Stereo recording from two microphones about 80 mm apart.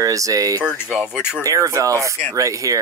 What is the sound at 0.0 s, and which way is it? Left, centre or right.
Speech, right.